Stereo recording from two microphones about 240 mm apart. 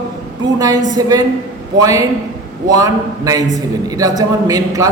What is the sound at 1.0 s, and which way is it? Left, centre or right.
A man's voice, centre.